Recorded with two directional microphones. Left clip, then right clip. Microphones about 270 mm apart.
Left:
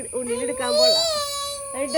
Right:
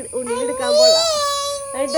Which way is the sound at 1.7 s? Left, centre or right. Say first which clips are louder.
Right 5 dB; centre.